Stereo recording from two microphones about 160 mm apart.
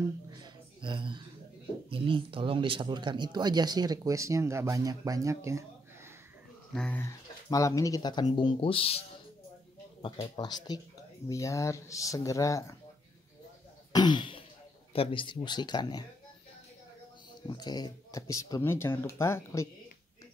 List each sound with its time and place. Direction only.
0.0 s a sound: 25° right (ahead or behind)
1.9 s speech: 35° right (ahead or behind); by 5.7 s 20° right (ahead or behind)
6.7 s speech: 5° left (ahead or behind); by 9.0 s 35° left (ahead or behind)
10.3 s speech: 25° left (ahead or behind)
13.9 s throat clearing: 30° left (ahead or behind)
14.9 s speech: 35° left (ahead or behind)
17.5 s speech: 25° left (ahead or behind)